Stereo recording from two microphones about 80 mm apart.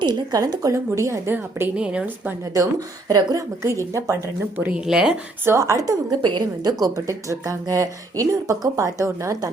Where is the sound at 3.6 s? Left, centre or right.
Right.